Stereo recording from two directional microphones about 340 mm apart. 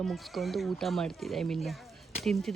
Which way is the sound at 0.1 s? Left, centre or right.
Centre.